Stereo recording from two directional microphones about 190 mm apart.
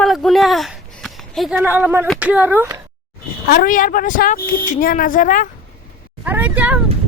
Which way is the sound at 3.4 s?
50° left (ahead or behind).